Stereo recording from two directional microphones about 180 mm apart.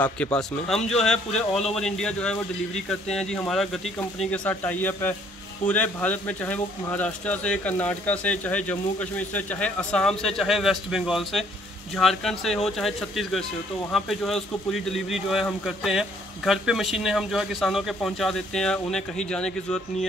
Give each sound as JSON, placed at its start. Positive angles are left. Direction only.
{"t": 0.0, "sound": "a man's voice", "side_deg": 5}